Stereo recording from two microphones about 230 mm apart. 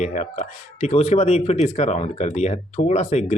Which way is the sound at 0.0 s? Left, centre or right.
Left.